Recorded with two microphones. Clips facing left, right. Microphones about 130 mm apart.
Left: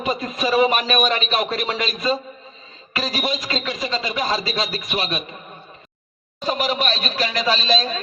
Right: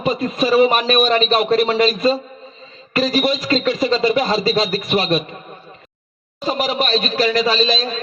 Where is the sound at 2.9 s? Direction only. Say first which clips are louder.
Right 7 dB; 45° right (ahead or behind).